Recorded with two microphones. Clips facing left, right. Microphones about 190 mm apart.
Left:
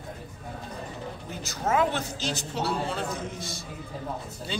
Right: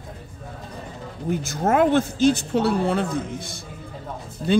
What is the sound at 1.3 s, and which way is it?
A man's voice, 50° right (ahead or behind).